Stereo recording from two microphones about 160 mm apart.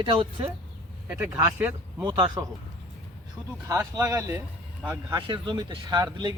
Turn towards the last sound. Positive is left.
turn(degrees=-25)  # may be behind; listen again after turning